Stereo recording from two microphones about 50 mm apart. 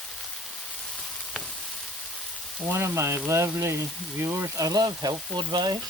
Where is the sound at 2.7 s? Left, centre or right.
Right.